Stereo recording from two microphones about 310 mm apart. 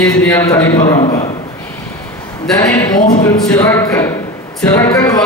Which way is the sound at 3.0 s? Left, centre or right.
Left.